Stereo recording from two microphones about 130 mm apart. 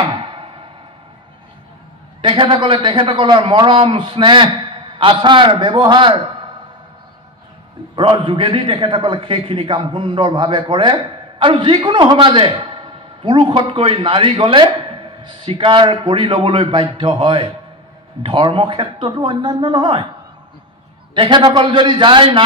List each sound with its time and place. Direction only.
2.2 s a man's voice: 40° right (ahead or behind)
7.9 s a man's voice: 35° right (ahead or behind)
21.1 s a man's voice: 35° right (ahead or behind)